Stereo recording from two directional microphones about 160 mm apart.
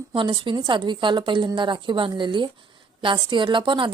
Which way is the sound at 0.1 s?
30° right (ahead or behind).